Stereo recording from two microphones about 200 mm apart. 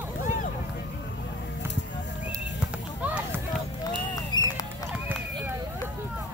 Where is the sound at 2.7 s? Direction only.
5° right (ahead or behind).